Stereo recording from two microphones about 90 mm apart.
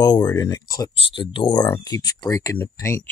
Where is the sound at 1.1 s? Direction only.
70° left (ahead or behind); by 1.7 s 55° left (ahead or behind).